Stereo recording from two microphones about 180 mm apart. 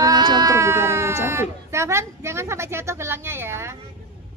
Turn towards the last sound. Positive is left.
turn(degrees=-15)  # may be behind; listen again after turning